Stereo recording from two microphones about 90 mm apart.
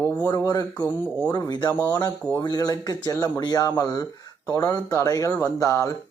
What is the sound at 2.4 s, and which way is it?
A man's voice, 50° left (ahead or behind).